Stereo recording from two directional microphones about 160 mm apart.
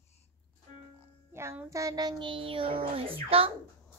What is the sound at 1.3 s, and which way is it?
Child singing, 15° right (ahead or behind).